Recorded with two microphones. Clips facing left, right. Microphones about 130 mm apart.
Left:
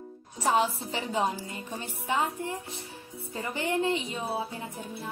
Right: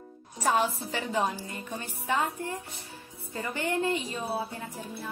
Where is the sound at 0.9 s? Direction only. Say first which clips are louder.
Left 1 dB; 20° left (ahead or behind).